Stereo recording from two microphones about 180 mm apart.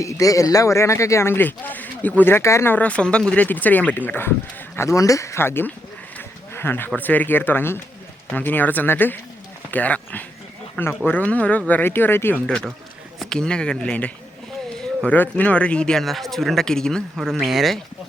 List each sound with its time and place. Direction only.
0.0 s a man's voice: 20° left (ahead or behind); by 17.7 s centre (ahead or behind)